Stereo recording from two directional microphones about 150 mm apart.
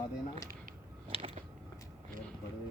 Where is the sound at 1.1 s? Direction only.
40° right (ahead or behind).